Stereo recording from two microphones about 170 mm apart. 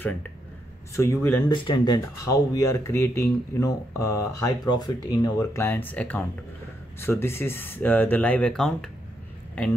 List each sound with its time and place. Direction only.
0.9 s speech: 15° left (ahead or behind)
1.5 s speech: 30° left (ahead or behind); by 8.9 s 5° left (ahead or behind)